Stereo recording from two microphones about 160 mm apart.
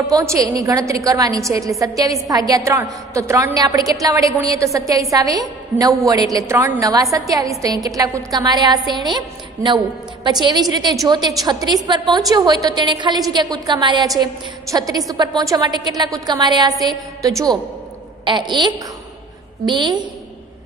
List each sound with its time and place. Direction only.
0.0 s a woman's voice: 20° right (ahead or behind)